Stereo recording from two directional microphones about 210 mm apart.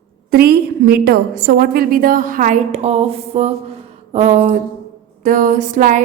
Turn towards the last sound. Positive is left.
turn(degrees=-40)  # may be behind; listen again after turning